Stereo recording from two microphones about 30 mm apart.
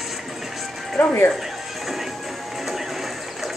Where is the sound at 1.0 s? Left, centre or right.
Left.